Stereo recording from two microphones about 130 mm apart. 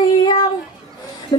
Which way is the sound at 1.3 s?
35° left (ahead or behind).